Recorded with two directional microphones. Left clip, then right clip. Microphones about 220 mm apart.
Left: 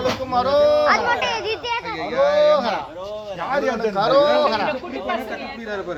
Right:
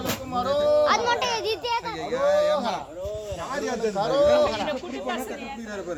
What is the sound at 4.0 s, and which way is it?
Speech, 45° left (ahead or behind).